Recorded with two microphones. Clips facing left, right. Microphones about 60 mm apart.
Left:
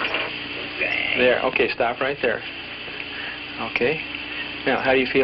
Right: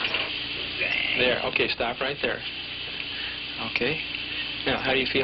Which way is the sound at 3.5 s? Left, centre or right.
Left.